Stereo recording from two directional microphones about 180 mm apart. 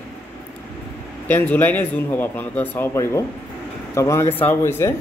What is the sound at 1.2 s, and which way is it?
Speech, 10° left (ahead or behind).